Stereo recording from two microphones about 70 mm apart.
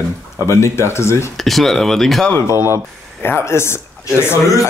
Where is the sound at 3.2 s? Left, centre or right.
Left.